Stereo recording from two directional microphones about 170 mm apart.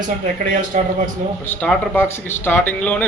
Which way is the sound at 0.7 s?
50° right (ahead or behind).